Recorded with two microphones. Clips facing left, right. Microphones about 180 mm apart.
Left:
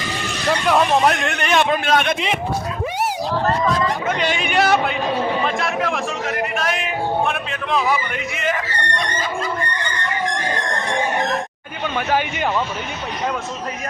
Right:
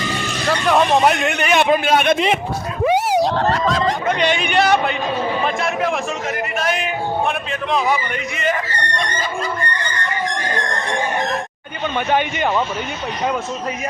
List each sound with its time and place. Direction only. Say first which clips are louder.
0.7 s speech: right 2 dB; centre (ahead or behind)
2.8 s a sound: right 11 dB; 75° right (ahead or behind)
4.0 s speech: right 3 dB; 5° left (ahead or behind)
11.9 s speech: right 2 dB; centre (ahead or behind)